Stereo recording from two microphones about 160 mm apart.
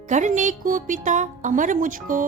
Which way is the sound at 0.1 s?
50° right (ahead or behind).